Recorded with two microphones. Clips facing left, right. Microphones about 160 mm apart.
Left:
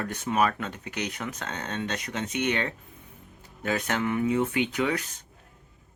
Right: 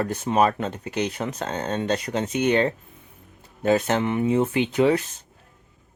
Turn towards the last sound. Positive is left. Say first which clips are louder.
# right 7 dB
turn(degrees=-30)  # may be behind; listen again after turning